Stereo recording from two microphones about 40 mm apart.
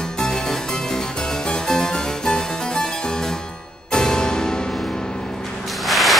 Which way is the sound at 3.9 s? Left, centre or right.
Centre.